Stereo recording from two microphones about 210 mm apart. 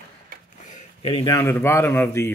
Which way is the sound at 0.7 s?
35° left (ahead or behind).